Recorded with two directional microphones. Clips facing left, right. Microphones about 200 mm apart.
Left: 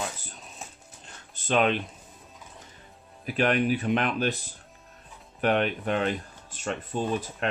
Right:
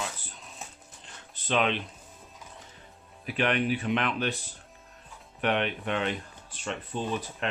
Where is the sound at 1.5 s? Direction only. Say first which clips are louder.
Left 3 dB; 45° left (ahead or behind).